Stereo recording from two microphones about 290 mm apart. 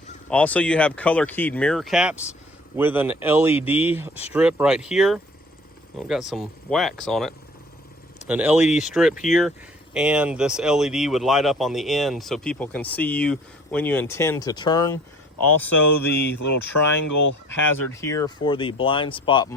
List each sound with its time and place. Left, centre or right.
0.3 s speech: centre
15.7 s speech: left
17.9 s speech: centre